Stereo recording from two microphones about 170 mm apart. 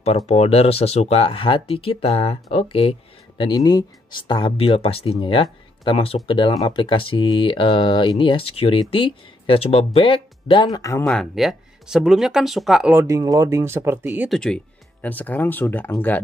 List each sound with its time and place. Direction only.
0.3 s speech: 35° left (ahead or behind); by 11.1 s 20° left (ahead or behind)
11.1 s speech: centre (ahead or behind)
12.9 s speech: 20° right (ahead or behind)
14.3 s speech: 5° left (ahead or behind)